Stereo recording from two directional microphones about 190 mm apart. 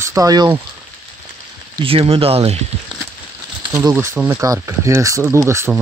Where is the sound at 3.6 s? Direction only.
20° right (ahead or behind).